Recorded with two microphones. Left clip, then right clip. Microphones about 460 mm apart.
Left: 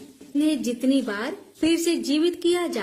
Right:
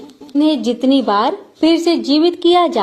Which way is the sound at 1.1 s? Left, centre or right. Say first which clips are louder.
Right 15 dB; left.